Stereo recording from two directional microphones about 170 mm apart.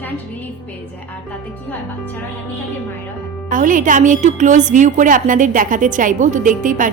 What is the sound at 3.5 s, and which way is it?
A woman's voice, 50° right (ahead or behind).